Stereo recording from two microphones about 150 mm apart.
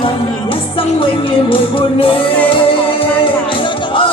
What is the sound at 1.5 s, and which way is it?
Music, 35° left (ahead or behind).